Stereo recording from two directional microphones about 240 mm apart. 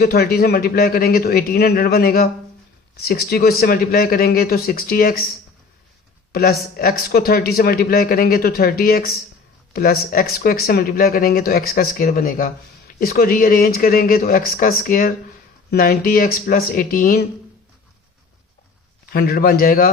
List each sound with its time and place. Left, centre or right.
0.0 s speech: left
6.3 s speech: left
19.1 s speech: left